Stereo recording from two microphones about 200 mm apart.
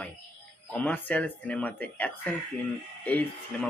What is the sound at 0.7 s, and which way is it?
Speech, 5° left (ahead or behind).